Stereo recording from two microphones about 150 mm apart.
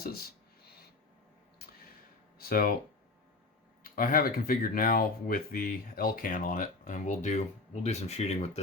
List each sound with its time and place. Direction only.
2.4 s speech: 75° left (ahead or behind)
3.8 s speech: 70° left (ahead or behind); by 8.6 s 45° left (ahead or behind)